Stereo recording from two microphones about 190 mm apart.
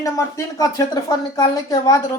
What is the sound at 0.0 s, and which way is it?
A woman's voice, 15° left (ahead or behind).